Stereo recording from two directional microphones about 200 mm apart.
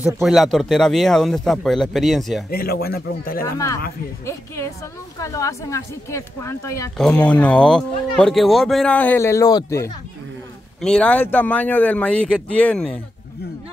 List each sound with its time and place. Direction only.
0.0 s speech: centre (ahead or behind)
2.5 s a man's voice: 50° left (ahead or behind)
3.4 s speech: 15° left (ahead or behind)
5.2 s speech: 15° left (ahead or behind)
7.0 s speech: 5° left (ahead or behind)
10.8 s speech: 5° left (ahead or behind)